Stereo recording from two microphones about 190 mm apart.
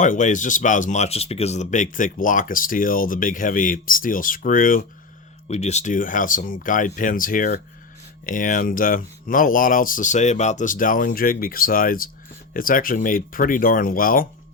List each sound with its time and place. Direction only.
0.0 s speech: 40° left (ahead or behind)
5.5 s speech: 35° left (ahead or behind)